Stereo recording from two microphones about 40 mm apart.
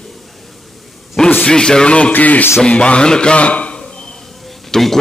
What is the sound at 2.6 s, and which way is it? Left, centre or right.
Speech, left.